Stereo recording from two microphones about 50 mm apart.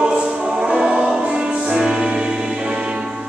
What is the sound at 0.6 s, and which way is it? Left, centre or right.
Music, centre.